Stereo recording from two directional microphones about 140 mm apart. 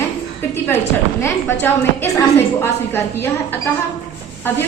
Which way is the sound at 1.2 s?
15° left (ahead or behind).